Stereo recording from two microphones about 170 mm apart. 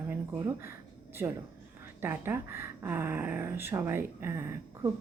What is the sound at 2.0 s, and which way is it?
A woman's voice, 15° right (ahead or behind).